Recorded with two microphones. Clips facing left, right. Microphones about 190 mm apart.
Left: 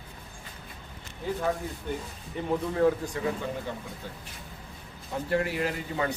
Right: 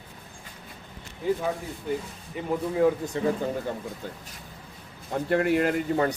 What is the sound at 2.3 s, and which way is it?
Speech, 5° right (ahead or behind).